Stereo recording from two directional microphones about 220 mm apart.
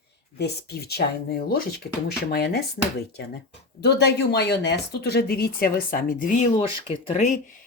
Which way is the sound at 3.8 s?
50° left (ahead or behind).